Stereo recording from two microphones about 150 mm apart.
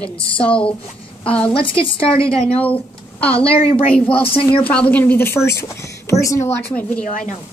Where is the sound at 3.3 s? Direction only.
40° left (ahead or behind).